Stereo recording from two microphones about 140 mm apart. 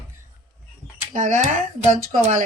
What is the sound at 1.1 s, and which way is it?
Speech, 65° right (ahead or behind).